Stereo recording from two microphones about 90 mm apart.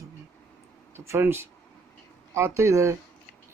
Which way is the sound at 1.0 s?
25° right (ahead or behind).